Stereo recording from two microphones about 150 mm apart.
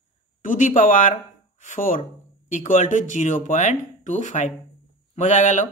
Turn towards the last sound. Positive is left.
turn(degrees=55)  # may be behind; listen again after turning